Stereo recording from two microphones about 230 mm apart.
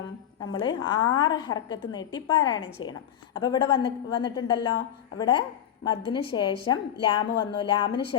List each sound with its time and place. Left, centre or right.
0.6 s a woman's voice: centre